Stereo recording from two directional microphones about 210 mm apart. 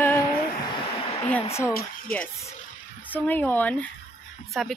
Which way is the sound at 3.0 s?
10° left (ahead or behind).